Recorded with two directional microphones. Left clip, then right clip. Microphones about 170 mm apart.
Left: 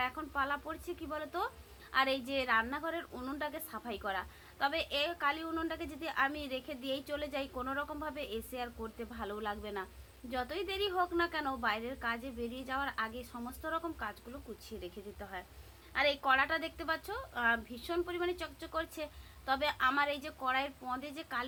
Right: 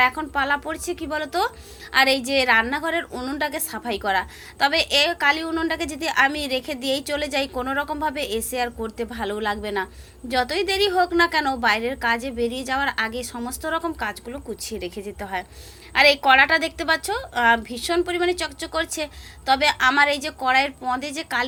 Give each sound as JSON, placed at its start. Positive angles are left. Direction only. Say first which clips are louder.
{"t": 0.0, "sound": "a woman's voice", "louder": "right 15 dB", "side_deg": -15}